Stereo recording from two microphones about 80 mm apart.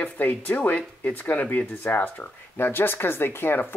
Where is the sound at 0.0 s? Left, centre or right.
Left.